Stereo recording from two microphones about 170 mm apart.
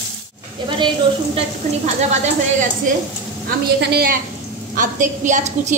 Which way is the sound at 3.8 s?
70° right (ahead or behind).